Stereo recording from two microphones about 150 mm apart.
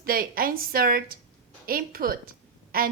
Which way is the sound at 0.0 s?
75° right (ahead or behind).